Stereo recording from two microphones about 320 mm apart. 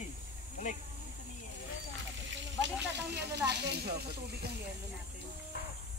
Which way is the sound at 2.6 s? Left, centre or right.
Right.